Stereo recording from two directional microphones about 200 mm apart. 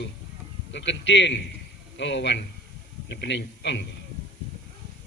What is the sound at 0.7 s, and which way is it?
A man's voice, 65° left (ahead or behind).